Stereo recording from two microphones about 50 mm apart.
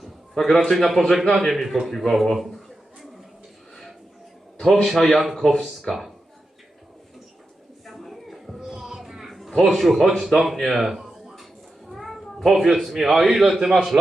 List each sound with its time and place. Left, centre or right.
0.0 s a man's voice: centre
4.6 s a man's voice: centre
7.9 s music: centre
8.7 s a sound: centre
12.5 s a man's voice: centre
13.9 s a man's voice: right